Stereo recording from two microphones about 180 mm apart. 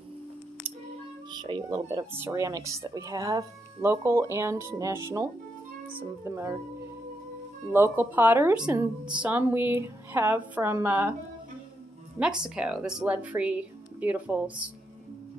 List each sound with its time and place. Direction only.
1.3 s speech: 25° right (ahead or behind)
7.7 s speech: 15° right (ahead or behind)
12.2 s speech: 5° right (ahead or behind)